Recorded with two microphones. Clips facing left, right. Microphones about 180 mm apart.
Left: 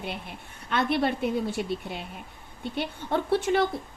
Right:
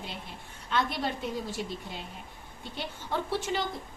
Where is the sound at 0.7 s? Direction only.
60° left (ahead or behind).